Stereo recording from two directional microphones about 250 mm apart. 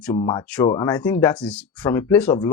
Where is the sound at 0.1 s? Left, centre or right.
Centre.